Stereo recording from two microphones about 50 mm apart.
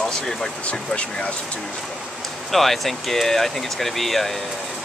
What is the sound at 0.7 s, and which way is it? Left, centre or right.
Speech, left.